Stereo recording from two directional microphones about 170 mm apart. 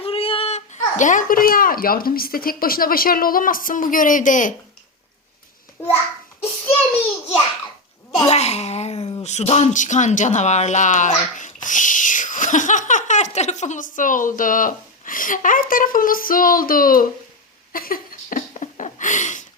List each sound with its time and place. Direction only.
0.0 s a child's voice: 35° left (ahead or behind); by 4.5 s 50° left (ahead or behind)
5.8 s a child's voice: 15° left (ahead or behind)
8.3 s speech: 40° left (ahead or behind); by 17.1 s 55° left (ahead or behind)
17.7 s a sound: 55° left (ahead or behind)